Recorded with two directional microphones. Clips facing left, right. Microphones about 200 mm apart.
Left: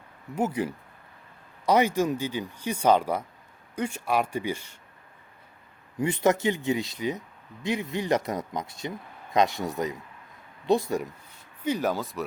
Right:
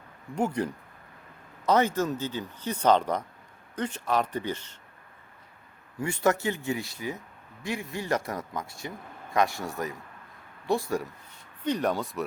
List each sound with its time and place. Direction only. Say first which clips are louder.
0.3 s speech: left 1 dB; 5° left (ahead or behind)
6.0 s speech: left 3 dB; 20° left (ahead or behind)
11.6 s speech: even; 5° left (ahead or behind)